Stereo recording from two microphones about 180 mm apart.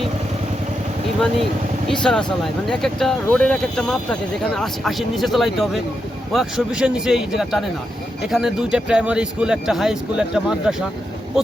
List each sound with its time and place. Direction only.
1.9 s speech: 5° left (ahead or behind)